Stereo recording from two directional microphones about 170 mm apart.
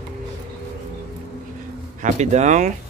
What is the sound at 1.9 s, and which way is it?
Speech, 45° right (ahead or behind).